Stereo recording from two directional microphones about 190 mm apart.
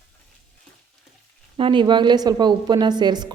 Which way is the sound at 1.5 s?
25° right (ahead or behind).